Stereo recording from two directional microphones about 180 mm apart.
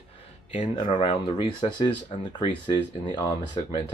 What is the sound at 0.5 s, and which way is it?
Speech, 30° left (ahead or behind).